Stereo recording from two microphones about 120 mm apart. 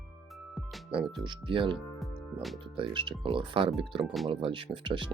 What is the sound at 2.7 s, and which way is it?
Speech, 45° right (ahead or behind).